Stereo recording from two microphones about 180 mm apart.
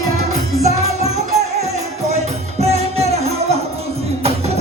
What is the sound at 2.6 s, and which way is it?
Music, 35° right (ahead or behind).